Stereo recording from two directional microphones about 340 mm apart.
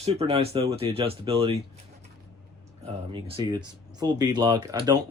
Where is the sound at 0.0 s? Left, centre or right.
Centre.